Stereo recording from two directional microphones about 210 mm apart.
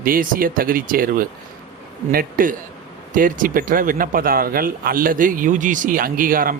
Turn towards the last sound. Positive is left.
turn(degrees=-40)  # may be behind; listen again after turning